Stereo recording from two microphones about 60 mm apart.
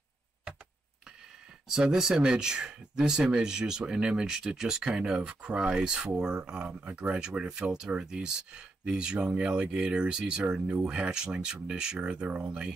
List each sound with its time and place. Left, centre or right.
1.7 s speech: centre
6.7 s speech: right